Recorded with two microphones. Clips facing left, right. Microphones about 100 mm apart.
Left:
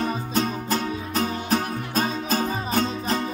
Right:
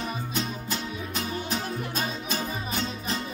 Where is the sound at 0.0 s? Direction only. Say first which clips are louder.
Left 7 dB; 40° left (ahead or behind).